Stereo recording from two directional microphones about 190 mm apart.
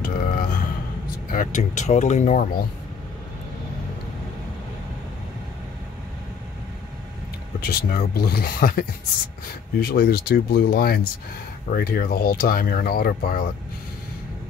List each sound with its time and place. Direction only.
0.0 s a sound: 45° left (ahead or behind)
1.3 s speech: 40° left (ahead or behind)
7.6 s speech: 55° left (ahead or behind)